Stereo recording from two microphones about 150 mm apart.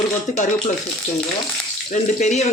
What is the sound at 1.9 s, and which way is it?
Speech, 50° left (ahead or behind).